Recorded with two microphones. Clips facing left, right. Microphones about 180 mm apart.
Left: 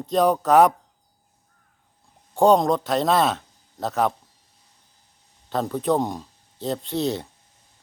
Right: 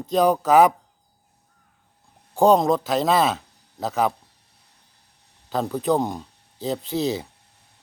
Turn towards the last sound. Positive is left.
turn(degrees=0)  # may be behind; listen again after turning